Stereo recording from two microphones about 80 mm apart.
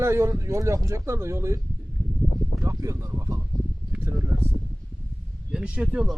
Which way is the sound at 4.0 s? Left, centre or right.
Right.